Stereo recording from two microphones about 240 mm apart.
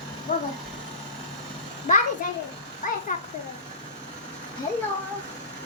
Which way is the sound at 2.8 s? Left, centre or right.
Left.